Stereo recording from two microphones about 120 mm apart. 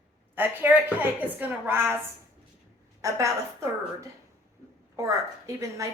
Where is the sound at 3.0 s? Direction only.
25° right (ahead or behind).